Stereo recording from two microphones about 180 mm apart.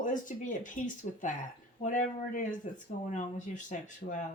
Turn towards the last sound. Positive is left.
turn(degrees=45)  # may be behind; listen again after turning